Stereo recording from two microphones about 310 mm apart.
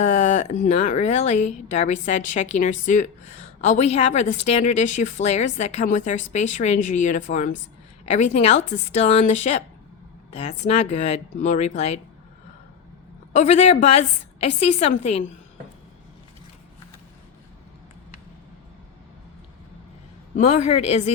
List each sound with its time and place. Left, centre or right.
0.0 s a woman's voice: left
13.3 s a woman's voice: left
20.3 s a woman's voice: left